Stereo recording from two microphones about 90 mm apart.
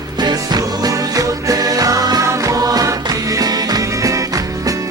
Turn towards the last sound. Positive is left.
turn(degrees=-40)  # may be behind; listen again after turning